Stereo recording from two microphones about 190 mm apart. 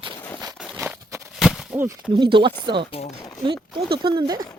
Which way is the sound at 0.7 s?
15° right (ahead or behind).